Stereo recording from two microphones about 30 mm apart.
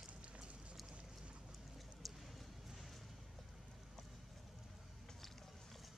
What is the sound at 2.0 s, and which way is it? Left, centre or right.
Bird, centre.